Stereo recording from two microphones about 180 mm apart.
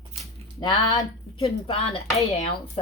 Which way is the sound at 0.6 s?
25° left (ahead or behind).